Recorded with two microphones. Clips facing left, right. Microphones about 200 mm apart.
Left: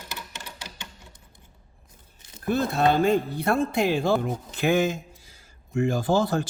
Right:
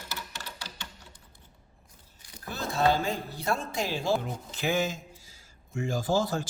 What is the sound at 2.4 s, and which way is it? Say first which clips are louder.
A man's voice: left 5 dB; 60° left (ahead or behind).